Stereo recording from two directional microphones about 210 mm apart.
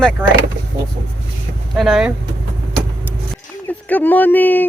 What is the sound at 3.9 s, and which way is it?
Speech, 10° left (ahead or behind).